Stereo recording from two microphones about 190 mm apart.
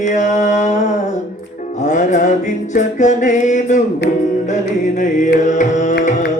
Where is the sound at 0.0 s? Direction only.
40° left (ahead or behind).